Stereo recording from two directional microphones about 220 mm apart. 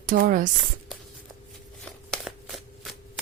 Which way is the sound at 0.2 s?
40° right (ahead or behind).